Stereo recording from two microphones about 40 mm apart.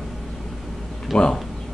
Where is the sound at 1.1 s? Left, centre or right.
Left.